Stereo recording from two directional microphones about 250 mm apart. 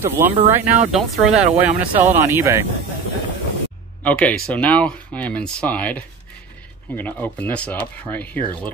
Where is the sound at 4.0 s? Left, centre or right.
Centre.